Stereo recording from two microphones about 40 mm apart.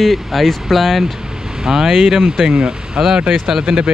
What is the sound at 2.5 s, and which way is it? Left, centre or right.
Speech, right.